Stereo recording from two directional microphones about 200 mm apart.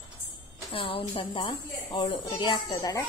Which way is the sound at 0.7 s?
25° left (ahead or behind).